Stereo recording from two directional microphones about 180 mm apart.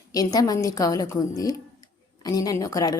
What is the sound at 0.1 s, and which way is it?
A woman's voice, 20° left (ahead or behind).